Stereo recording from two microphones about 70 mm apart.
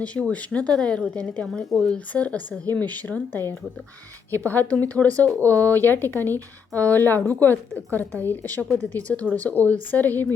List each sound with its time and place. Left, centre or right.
0.0 s a woman's voice: centre
1.7 s speech: centre
2.1 s speech: left
4.4 s a woman's voice: left
8.9 s speech: right
9.3 s speech: left